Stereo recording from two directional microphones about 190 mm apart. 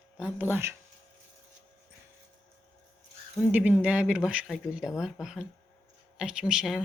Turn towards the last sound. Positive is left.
turn(degrees=0)  # may be behind; listen again after turning